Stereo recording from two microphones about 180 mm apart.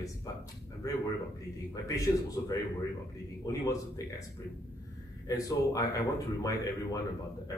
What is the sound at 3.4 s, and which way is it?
Speech, 20° left (ahead or behind).